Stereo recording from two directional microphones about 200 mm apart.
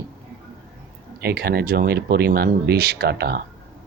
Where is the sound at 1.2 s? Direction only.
50° right (ahead or behind).